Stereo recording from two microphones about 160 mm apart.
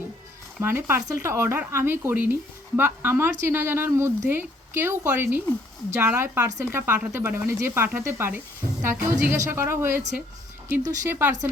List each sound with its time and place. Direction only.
0.6 s speech: 15° right (ahead or behind)